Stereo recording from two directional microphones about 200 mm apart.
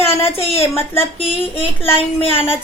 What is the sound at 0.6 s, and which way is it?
Speech, 10° left (ahead or behind).